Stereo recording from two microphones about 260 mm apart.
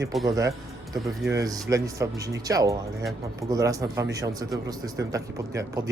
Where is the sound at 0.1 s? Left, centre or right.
Centre.